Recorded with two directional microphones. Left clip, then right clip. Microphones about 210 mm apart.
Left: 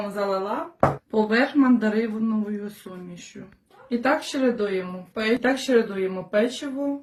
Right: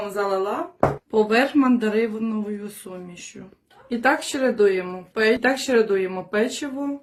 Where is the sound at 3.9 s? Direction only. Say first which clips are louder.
Right 2 dB; 55° right (ahead or behind).